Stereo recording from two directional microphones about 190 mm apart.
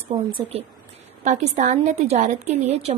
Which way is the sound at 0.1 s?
30° right (ahead or behind).